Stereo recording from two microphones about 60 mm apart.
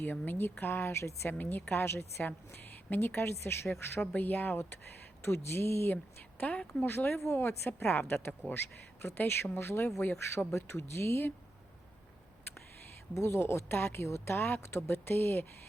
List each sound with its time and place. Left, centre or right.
0.0 s a woman's voice: left
1.4 s a woman's voice: left
4.1 s a woman's voice: left
5.2 s speech: left
6.4 s speech: left
6.8 s a woman's voice: left
13.1 s a woman's voice: left